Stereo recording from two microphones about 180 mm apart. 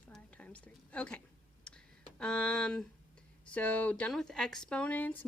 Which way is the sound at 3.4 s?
10° left (ahead or behind).